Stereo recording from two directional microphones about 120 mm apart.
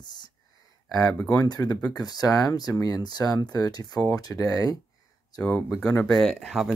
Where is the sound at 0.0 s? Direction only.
35° left (ahead or behind).